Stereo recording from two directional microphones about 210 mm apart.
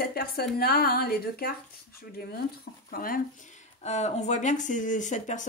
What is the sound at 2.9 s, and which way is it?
Speech, 40° left (ahead or behind).